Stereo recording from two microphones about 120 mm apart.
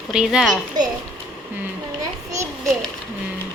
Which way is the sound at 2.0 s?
25° right (ahead or behind).